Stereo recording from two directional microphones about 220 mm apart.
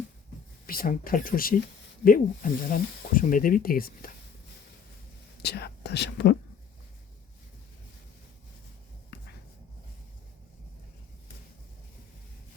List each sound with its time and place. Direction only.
0.7 s speech: 40° left (ahead or behind)
5.4 s speech: 50° left (ahead or behind)